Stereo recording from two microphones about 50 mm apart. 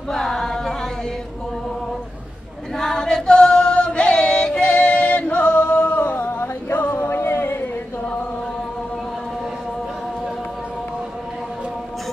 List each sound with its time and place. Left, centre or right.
0.1 s a capella: centre
2.8 s female singing: centre; by 6.2 s left
6.7 s singing: left
7.0 s singing: left